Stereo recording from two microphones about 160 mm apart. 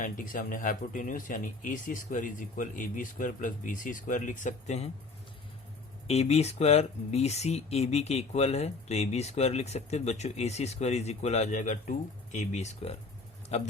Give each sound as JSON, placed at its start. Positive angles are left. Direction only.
{"t": 0.0, "sound": "speech", "side_deg": 55}
{"t": 6.1, "sound": "speech", "side_deg": 40}